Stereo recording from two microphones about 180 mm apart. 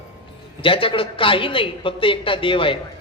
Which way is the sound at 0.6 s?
30° left (ahead or behind).